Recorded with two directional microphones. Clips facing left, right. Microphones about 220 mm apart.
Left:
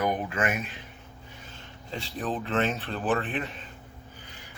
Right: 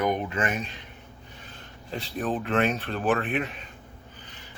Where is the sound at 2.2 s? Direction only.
15° right (ahead or behind).